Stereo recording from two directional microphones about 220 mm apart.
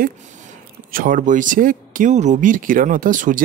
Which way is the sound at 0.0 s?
35° right (ahead or behind).